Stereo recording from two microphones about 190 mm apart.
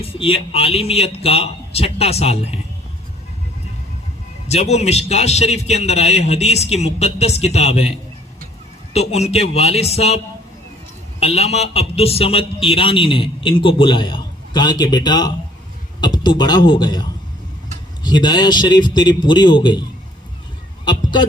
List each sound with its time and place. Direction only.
0.0 s a man's voice: 30° left (ahead or behind)
4.4 s a man's voice: 35° left (ahead or behind)
11.2 s a man's voice: 35° left (ahead or behind)
20.8 s speech: 25° left (ahead or behind)